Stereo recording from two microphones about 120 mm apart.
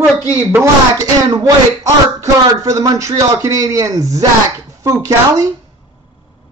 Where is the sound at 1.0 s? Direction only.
30° right (ahead or behind).